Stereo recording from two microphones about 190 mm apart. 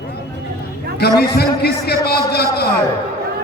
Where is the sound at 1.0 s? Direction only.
55° left (ahead or behind).